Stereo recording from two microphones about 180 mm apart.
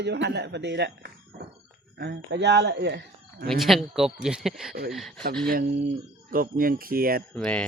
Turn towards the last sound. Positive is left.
turn(degrees=5)  # may be behind; listen again after turning